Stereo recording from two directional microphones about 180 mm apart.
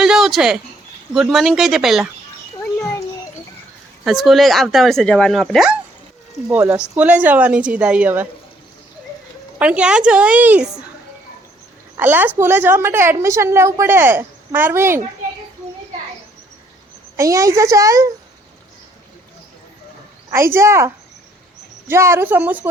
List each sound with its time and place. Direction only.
0.0 s a sound: centre (ahead or behind)
1.1 s speech: centre (ahead or behind)
4.0 s speech: centre (ahead or behind)
9.6 s speech: 5° right (ahead or behind)
11.9 s speech: 10° right (ahead or behind)
17.2 s speech: 20° right (ahead or behind)
20.3 s speech: 15° right (ahead or behind)